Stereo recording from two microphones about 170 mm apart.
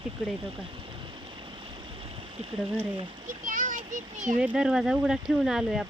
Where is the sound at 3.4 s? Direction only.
50° right (ahead or behind).